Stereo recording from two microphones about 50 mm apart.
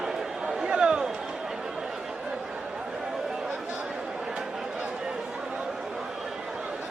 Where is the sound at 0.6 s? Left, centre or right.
Centre.